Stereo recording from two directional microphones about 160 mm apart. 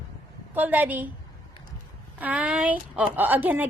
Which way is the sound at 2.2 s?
5° right (ahead or behind).